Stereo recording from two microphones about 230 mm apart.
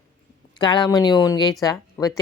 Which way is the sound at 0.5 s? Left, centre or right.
Centre.